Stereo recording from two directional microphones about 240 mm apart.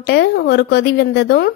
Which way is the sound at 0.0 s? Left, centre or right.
Left.